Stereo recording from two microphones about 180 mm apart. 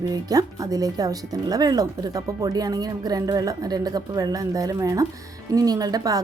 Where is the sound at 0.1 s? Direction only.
20° right (ahead or behind).